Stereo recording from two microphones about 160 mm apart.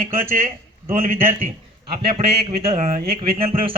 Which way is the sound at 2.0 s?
40° right (ahead or behind).